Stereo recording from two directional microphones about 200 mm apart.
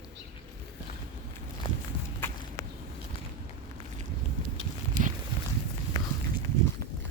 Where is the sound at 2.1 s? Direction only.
10° left (ahead or behind).